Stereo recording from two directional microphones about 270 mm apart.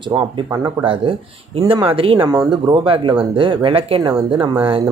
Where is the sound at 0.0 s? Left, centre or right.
Centre.